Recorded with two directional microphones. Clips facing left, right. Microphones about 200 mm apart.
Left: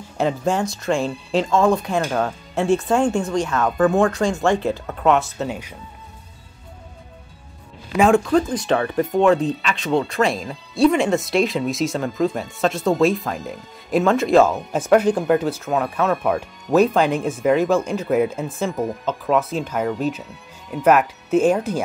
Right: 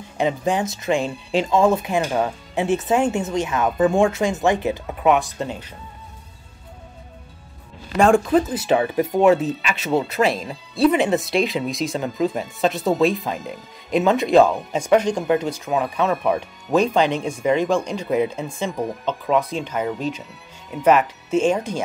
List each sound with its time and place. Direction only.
0.2 s speech: centre (ahead or behind); by 3.6 s 20° right (ahead or behind)
3.8 s speech: 10° right (ahead or behind)
4.1 s speech: 20° right (ahead or behind)
5.2 s speech: 5° left (ahead or behind)
8.0 s speech: centre (ahead or behind)